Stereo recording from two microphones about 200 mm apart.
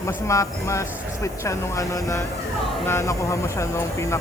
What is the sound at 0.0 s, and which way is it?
Speech, 15° left (ahead or behind).